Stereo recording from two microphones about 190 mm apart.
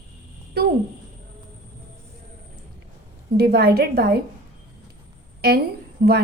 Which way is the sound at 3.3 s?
55° right (ahead or behind).